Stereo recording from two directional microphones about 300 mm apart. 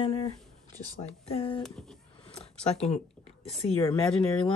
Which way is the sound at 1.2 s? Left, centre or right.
Centre.